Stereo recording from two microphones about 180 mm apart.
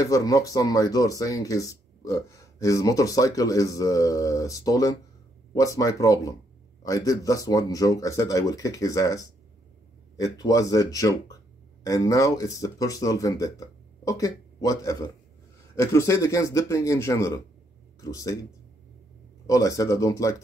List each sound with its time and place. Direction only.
0.0 s speech: 20° left (ahead or behind)
19.4 s speech: 20° left (ahead or behind)